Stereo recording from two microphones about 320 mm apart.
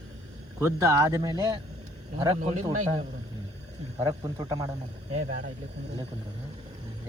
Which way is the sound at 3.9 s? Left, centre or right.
Centre.